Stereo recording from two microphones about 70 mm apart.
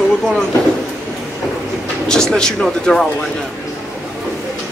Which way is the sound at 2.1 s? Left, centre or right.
Centre.